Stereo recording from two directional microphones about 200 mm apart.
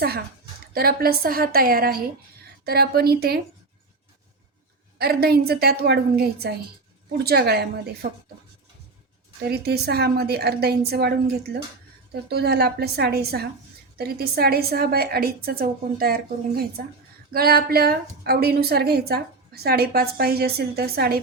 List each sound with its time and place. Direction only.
0.7 s a woman's voice: 50° right (ahead or behind)
4.9 s a woman's voice: 50° right (ahead or behind)
9.4 s a woman's voice: 50° right (ahead or behind)
12.3 s a woman's voice: 55° right (ahead or behind)